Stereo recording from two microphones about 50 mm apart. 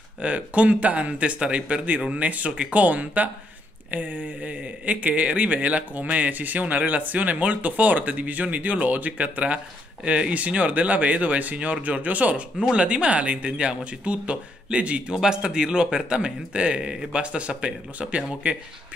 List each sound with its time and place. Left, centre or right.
0.2 s speech: right
15.1 s a man's voice: centre